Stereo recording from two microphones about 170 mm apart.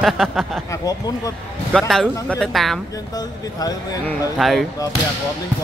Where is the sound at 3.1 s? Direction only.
20° left (ahead or behind).